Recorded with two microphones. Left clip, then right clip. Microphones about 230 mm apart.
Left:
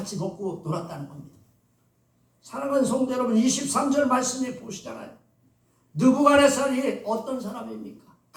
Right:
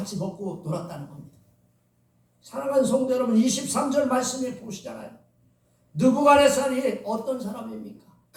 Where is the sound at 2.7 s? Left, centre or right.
Centre.